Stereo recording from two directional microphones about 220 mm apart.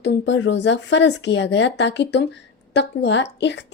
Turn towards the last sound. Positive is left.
turn(degrees=50)  # may be behind; listen again after turning